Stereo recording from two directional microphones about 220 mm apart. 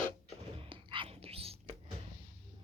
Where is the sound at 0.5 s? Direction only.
25° right (ahead or behind).